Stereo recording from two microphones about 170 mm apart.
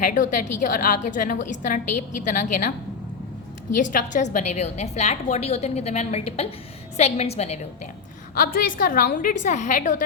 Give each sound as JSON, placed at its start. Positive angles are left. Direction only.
{"t": 0.0, "sound": "a woman's voice", "side_deg": 50}
{"t": 3.8, "sound": "a woman's voice", "side_deg": 50}
{"t": 8.4, "sound": "a woman's voice", "side_deg": 55}